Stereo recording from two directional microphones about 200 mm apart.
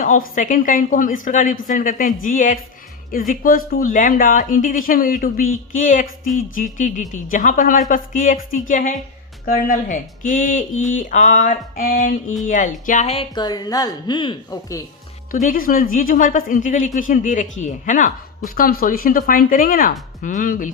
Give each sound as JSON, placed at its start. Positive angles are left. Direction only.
{"t": 0.0, "sound": "speech", "side_deg": 40}
{"t": 15.3, "sound": "speech", "side_deg": 40}